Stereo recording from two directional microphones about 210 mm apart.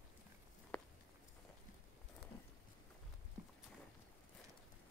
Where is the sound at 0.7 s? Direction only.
5° left (ahead or behind).